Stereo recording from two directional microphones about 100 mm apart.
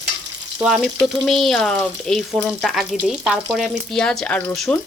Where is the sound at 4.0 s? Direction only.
10° left (ahead or behind).